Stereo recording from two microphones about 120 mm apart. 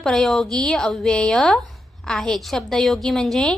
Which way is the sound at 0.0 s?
5° left (ahead or behind).